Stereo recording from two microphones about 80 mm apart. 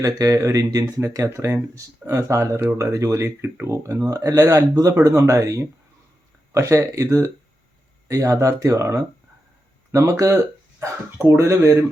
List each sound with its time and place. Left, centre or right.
0.0 s speech: right